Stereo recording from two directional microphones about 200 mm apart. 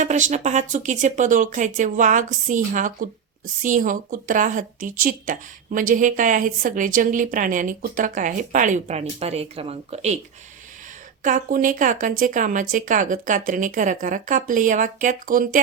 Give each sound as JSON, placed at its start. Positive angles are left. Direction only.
{"t": 0.0, "sound": "speech", "side_deg": -35}
{"t": 11.2, "sound": "speech", "side_deg": -40}